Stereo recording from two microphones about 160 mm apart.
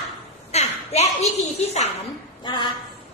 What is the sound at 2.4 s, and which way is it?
Speech, 30° left (ahead or behind).